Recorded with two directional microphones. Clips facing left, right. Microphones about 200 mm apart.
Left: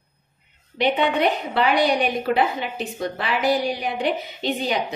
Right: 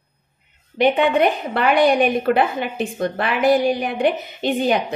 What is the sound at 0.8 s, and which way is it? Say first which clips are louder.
A woman's voice: right 4 dB; 50° right (ahead or behind).